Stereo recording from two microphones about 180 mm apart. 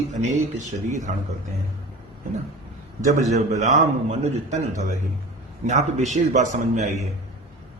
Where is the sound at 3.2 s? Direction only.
40° right (ahead or behind).